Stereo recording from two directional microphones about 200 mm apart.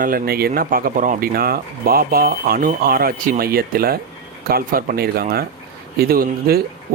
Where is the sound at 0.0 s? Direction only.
45° right (ahead or behind).